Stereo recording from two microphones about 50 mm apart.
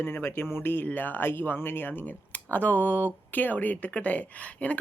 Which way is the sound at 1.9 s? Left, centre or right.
Left.